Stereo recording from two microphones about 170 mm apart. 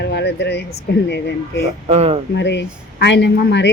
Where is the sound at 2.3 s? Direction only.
90° left.